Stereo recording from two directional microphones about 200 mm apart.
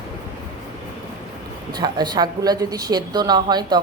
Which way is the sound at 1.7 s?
20° right (ahead or behind).